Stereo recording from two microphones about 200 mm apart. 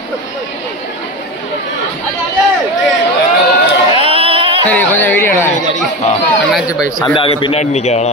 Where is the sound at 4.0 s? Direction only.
25° right (ahead or behind).